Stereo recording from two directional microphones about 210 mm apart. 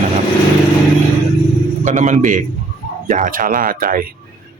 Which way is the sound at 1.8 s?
35° right (ahead or behind).